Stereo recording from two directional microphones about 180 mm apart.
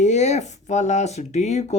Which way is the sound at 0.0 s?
40° left (ahead or behind).